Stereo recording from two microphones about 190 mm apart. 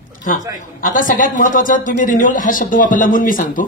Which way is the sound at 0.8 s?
45° left (ahead or behind).